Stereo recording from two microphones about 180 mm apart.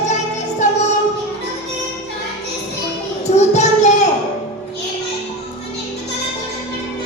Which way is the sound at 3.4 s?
40° left (ahead or behind).